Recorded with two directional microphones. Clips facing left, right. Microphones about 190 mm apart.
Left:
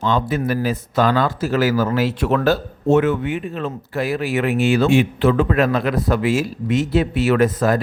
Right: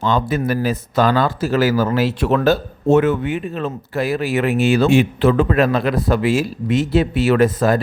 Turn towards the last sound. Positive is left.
turn(degrees=-30)  # may be behind; listen again after turning